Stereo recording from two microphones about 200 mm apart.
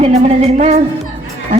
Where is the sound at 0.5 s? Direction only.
35° right (ahead or behind).